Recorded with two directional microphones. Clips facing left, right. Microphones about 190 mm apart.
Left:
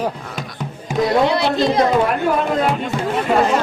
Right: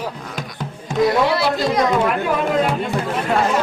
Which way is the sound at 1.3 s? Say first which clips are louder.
Left 2 dB; 20° left (ahead or behind).